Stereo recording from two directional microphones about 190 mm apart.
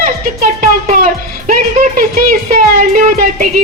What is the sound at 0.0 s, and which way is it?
A child's voice, 45° right (ahead or behind).